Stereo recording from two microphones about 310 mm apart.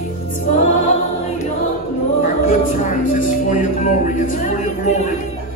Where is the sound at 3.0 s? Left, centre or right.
Left.